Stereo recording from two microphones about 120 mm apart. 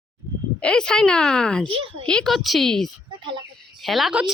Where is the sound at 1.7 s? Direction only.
50° right (ahead or behind).